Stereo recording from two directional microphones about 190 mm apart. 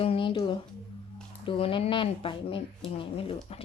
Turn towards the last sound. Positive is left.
turn(degrees=30)  # may be behind; listen again after turning